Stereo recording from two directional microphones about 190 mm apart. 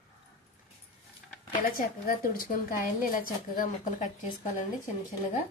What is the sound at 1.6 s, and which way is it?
A woman's voice, 45° left (ahead or behind).